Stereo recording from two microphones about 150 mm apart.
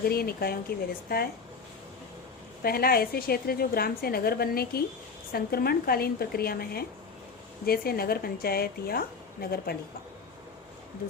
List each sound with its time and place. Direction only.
0.1 s a woman's voice: 90° left
2.6 s a woman's voice: 90° left